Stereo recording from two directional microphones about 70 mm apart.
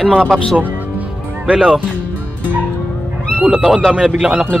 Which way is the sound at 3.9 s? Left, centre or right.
Centre.